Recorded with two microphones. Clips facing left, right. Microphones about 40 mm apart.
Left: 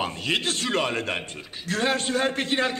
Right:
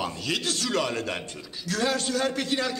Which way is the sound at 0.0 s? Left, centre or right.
Left.